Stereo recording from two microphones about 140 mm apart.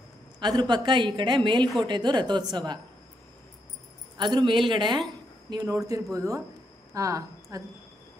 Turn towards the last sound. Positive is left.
turn(degrees=-25)  # may be behind; listen again after turning